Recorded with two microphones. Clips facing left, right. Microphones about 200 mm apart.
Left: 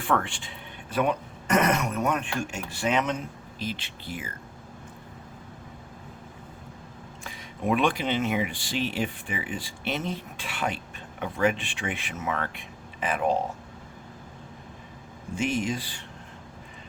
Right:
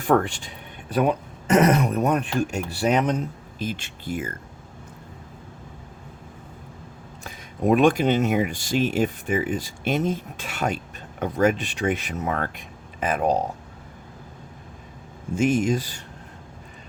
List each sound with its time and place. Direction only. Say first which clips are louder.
0.0 s speech: right 7 dB; 40° right (ahead or behind)
7.3 s speech: right 6 dB; 45° right (ahead or behind)
15.4 s speech: right 7 dB; 45° right (ahead or behind)